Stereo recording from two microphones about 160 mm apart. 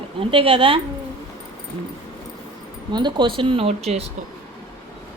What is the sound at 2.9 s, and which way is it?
A woman's voice, 30° right (ahead or behind).